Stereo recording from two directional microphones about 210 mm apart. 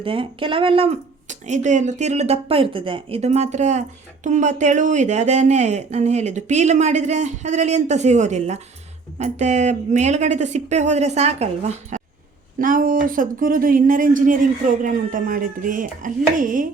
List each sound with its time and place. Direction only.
0.0 s speech: 25° right (ahead or behind)